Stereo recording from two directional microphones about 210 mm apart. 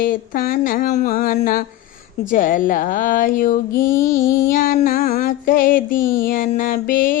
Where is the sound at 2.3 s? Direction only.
40° left (ahead or behind).